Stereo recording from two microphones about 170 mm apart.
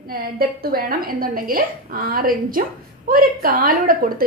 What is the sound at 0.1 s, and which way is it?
A woman's voice, 60° right (ahead or behind).